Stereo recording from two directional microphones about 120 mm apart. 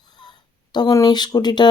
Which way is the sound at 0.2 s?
35° left (ahead or behind).